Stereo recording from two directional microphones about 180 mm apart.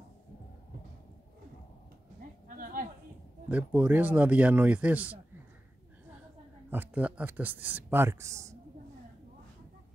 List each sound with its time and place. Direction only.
2.4 s a sound: 50° right (ahead or behind)
3.4 s a man's voice: 10° right (ahead or behind)
6.7 s a man's voice: 10° right (ahead or behind)